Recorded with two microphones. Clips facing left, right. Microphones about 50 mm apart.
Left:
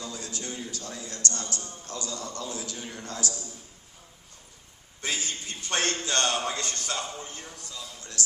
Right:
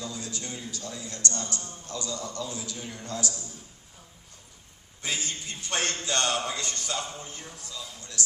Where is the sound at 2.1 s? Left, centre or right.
Left.